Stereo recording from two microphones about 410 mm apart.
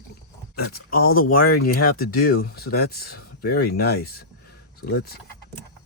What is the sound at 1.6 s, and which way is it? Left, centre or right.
Speech, left.